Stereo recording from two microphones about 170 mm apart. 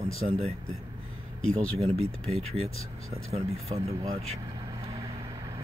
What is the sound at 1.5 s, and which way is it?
Speech, 5° left (ahead or behind).